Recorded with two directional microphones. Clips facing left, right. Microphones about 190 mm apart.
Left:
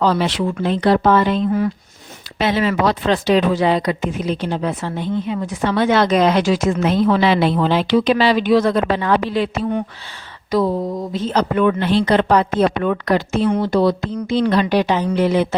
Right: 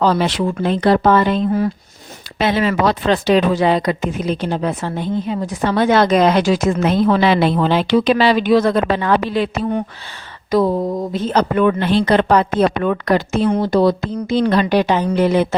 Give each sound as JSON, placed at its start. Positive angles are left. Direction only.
{"t": 0.0, "sound": "speech", "side_deg": -45}
{"t": 2.4, "sound": "speech", "side_deg": -55}